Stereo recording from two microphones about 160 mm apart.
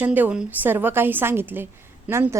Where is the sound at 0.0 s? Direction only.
10° right (ahead or behind).